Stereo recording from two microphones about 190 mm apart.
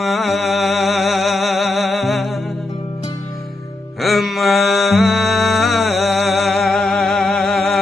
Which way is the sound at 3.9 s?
Centre (ahead or behind).